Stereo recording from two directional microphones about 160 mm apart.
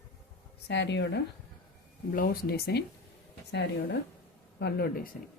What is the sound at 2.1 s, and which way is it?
Speech, 70° left (ahead or behind).